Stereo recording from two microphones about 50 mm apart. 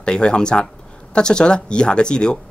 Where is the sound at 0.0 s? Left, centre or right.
Centre.